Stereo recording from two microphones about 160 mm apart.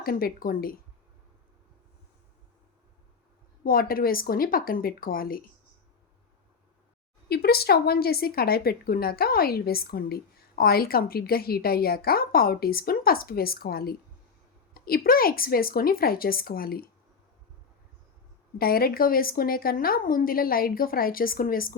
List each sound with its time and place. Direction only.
0.0 s a woman's voice: 65° left (ahead or behind)
3.6 s a woman's voice: 65° left (ahead or behind)
7.3 s a woman's voice: 80° left
18.6 s a woman's voice: 70° left (ahead or behind)